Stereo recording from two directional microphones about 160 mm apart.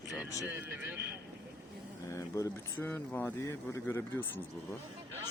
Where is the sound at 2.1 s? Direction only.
20° left (ahead or behind).